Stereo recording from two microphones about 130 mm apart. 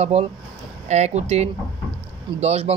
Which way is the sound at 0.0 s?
55° right (ahead or behind).